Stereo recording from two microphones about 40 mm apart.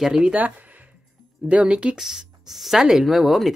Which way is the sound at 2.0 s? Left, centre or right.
Centre.